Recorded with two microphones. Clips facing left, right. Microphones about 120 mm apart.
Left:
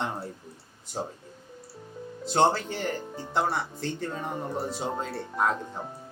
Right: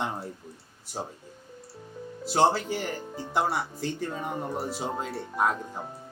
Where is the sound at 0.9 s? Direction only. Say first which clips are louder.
Left 2 dB; centre (ahead or behind).